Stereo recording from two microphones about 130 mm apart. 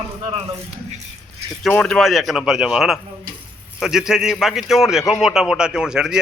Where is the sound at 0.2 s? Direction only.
40° right (ahead or behind).